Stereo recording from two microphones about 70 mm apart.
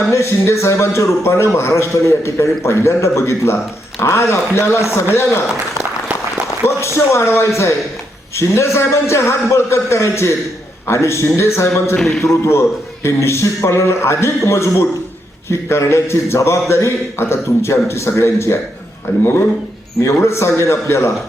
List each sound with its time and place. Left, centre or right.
0.1 s a man's voice: left
6.8 s a man's voice: left
11.9 s a man's voice: centre
12.2 s a man's voice: left